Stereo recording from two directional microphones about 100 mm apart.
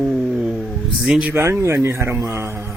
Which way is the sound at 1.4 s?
30° right (ahead or behind).